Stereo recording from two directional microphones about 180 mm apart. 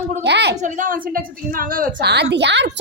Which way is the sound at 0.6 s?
45° right (ahead or behind).